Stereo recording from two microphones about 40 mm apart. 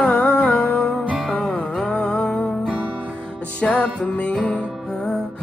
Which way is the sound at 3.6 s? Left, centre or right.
Left.